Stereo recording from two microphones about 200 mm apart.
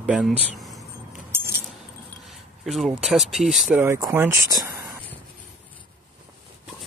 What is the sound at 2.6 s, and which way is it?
Speech, centre (ahead or behind).